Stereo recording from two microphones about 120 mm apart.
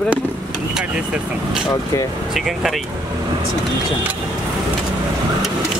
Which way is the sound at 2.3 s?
Centre (ahead or behind).